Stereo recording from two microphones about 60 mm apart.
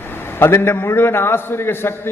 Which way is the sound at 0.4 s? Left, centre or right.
Left.